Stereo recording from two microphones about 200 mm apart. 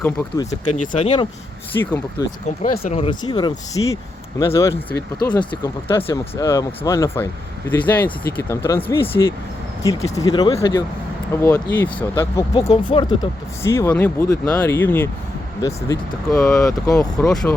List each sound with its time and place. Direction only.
0.0 s speech: 10° left (ahead or behind)
0.9 s speech: 25° left (ahead or behind)
2.6 s speech: 35° left (ahead or behind)
11.3 s speech: 10° left (ahead or behind)
12.5 s speech: 30° left (ahead or behind)
13.6 s speech: 15° left (ahead or behind)
16.4 s speech: 5° left (ahead or behind)
16.6 s speech: 15° left (ahead or behind)
17.0 s speech: 5° left (ahead or behind)